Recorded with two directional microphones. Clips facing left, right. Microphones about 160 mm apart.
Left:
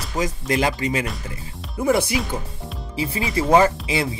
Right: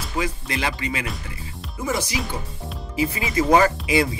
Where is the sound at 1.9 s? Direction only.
60° left (ahead or behind).